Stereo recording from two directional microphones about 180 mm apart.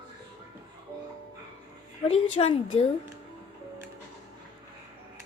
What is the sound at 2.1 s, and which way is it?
Speech, 30° left (ahead or behind).